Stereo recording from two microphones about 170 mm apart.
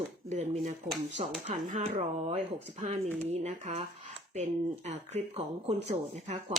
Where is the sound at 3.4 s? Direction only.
40° right (ahead or behind).